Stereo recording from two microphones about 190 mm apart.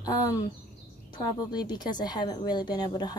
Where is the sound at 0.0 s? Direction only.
20° left (ahead or behind).